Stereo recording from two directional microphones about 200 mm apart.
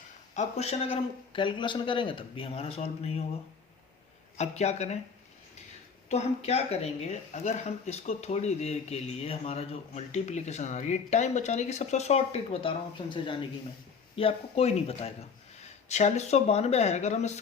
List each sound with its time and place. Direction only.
0.3 s speech: 30° left (ahead or behind)
4.4 s speech: 35° left (ahead or behind)
6.1 s speech: 35° left (ahead or behind)